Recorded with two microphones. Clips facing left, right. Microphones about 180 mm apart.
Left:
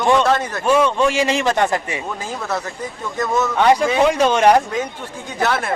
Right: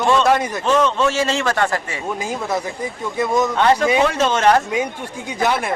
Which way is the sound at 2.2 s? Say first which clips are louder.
Right 2 dB; 15° right (ahead or behind).